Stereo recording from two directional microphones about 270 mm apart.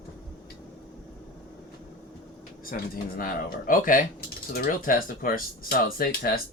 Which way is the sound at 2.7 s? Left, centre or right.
Left.